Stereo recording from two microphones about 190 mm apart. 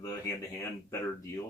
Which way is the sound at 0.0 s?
15° left (ahead or behind).